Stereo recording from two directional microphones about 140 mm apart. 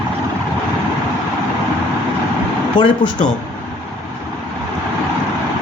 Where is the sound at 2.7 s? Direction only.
35° left (ahead or behind).